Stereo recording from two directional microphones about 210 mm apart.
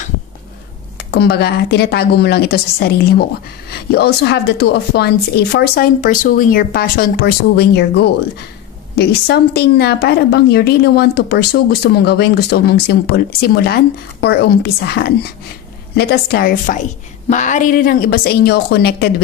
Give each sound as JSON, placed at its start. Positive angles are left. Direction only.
{"t": 0.9, "sound": "speech", "side_deg": 50}